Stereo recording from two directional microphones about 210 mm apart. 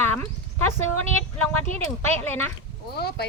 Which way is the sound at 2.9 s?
50° left (ahead or behind).